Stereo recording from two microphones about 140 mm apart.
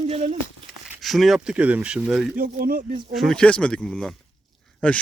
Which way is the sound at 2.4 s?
90° right.